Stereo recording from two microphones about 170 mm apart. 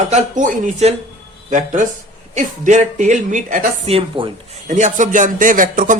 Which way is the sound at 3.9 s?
30° right (ahead or behind).